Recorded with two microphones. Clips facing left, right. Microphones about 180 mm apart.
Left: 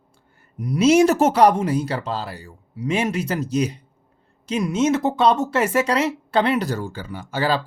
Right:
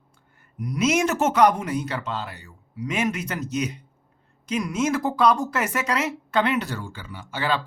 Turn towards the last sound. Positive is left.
turn(degrees=35)  # may be behind; listen again after turning